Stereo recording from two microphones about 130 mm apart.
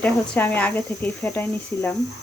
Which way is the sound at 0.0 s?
15° left (ahead or behind).